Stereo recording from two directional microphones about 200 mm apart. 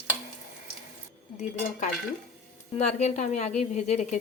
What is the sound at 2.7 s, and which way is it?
A woman's voice, 35° left (ahead or behind).